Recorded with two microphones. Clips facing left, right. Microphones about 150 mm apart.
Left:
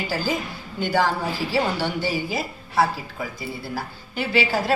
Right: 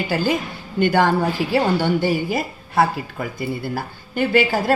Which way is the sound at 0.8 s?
60° right (ahead or behind).